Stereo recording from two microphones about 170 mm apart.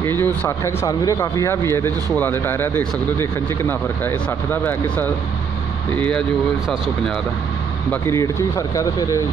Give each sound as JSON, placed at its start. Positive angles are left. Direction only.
{"t": 0.0, "sound": "speech", "side_deg": 10}
{"t": 7.9, "sound": "speech", "side_deg": 15}